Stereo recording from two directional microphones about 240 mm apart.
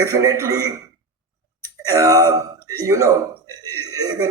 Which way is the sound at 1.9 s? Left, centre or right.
Centre.